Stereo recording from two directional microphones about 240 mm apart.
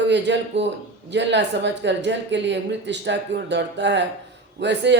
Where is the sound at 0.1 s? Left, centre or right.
Right.